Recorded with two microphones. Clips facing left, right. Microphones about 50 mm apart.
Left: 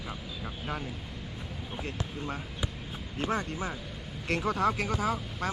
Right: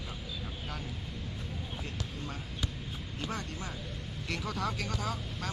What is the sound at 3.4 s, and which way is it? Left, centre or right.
Speech, centre.